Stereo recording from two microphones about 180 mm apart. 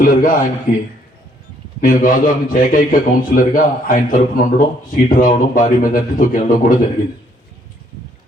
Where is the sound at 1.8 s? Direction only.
50° left (ahead or behind).